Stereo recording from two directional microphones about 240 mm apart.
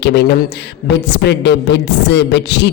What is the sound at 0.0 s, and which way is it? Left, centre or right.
Speech, left.